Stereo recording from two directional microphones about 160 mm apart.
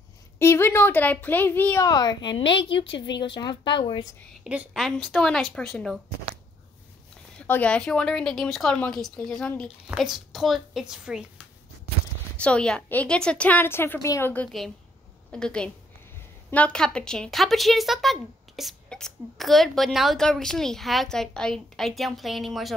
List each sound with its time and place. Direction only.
0.4 s a woman's voice: 15° left (ahead or behind)
4.5 s a woman's voice: 5° right (ahead or behind)
7.3 s a woman's voice: 10° left (ahead or behind)
12.4 s a woman's voice: 5° left (ahead or behind)